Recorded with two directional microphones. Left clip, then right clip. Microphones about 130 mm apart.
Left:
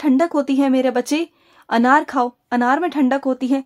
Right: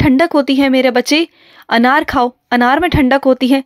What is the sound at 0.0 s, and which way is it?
Speech, 30° right (ahead or behind).